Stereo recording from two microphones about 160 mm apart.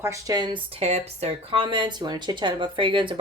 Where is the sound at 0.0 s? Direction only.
20° right (ahead or behind).